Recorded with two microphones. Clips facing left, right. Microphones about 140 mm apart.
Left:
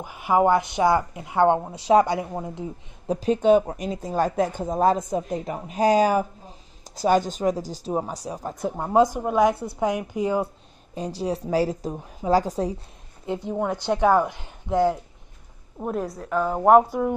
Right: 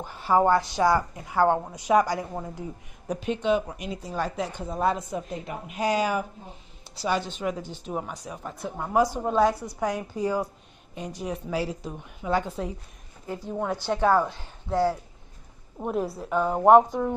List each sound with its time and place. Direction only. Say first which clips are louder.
0.0 s a woman's voice: left 2 dB; 15° left (ahead or behind)
3.2 s a woman's voice: left 7 dB; 40° left (ahead or behind)
8.8 s a woman's voice: left 4 dB; 25° left (ahead or behind)
9.1 s a woman's voice: left 2 dB; 15° left (ahead or behind)
11.0 s a woman's voice: left 5 dB; 35° left (ahead or behind)
13.3 s a woman's voice: left 4 dB; 20° left (ahead or behind)
15.8 s a woman's voice: even; centre (ahead or behind)